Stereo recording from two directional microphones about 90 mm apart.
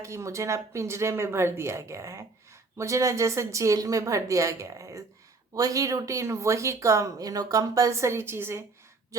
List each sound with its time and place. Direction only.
0.0 s speech: 35° right (ahead or behind)